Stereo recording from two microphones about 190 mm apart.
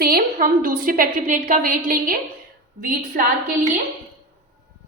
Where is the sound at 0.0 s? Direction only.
50° right (ahead or behind).